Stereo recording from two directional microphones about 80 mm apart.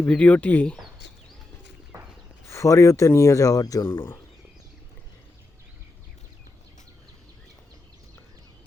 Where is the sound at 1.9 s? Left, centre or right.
Right.